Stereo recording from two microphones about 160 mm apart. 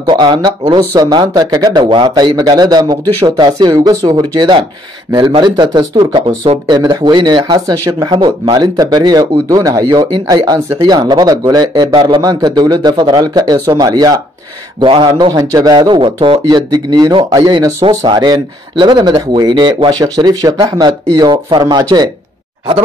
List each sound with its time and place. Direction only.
0.0 s speech: 30° right (ahead or behind)